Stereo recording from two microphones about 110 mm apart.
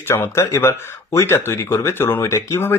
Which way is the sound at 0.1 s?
25° left (ahead or behind).